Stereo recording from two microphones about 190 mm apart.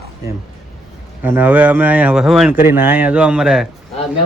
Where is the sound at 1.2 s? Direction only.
10° right (ahead or behind).